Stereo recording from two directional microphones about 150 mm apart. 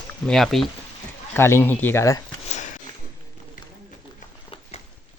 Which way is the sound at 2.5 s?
50° left (ahead or behind).